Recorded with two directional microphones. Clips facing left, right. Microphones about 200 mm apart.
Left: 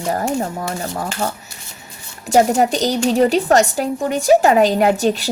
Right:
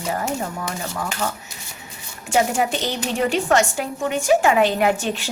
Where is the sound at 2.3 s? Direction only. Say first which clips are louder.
Left 6 dB; 40° left (ahead or behind).